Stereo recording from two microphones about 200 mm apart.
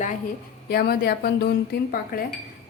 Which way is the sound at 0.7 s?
50° left (ahead or behind).